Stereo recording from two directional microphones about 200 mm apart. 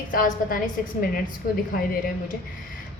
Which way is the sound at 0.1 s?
45° left (ahead or behind).